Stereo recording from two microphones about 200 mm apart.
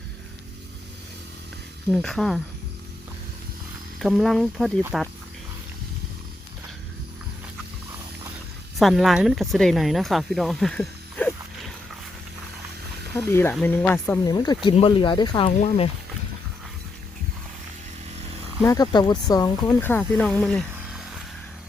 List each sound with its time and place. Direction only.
1.9 s speech: centre (ahead or behind)
4.0 s speech: centre (ahead or behind)
8.8 s speech: centre (ahead or behind)
13.2 s speech: 10° left (ahead or behind)
14.3 s speech: 20° left (ahead or behind)
15.4 s speech: 35° left (ahead or behind)
18.6 s speech: 20° left (ahead or behind); by 21.1 s centre (ahead or behind)